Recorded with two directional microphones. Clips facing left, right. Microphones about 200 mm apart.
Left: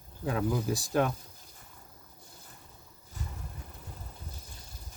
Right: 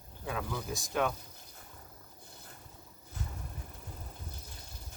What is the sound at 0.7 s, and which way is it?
Speech, 35° left (ahead or behind).